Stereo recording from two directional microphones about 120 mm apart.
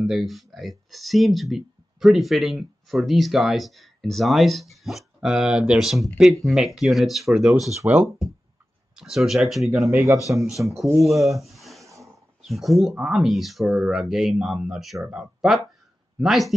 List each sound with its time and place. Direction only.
0.0 s speech: centre (ahead or behind)
7.7 s speech: 15° right (ahead or behind)
8.9 s speech: 5° right (ahead or behind)
9.8 s a man's voice: 20° right (ahead or behind)
10.5 s speech: centre (ahead or behind)
11.3 s a sound: centre (ahead or behind)
11.8 s roaring cats: 25° right (ahead or behind)
12.4 s speech: centre (ahead or behind)